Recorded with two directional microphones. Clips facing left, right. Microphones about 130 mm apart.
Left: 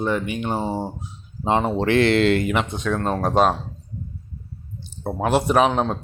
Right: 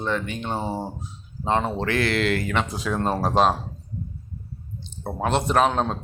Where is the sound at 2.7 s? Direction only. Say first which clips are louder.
Left 1 dB; 5° right (ahead or behind).